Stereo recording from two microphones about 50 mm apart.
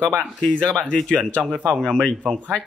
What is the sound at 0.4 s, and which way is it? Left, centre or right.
Speech, left.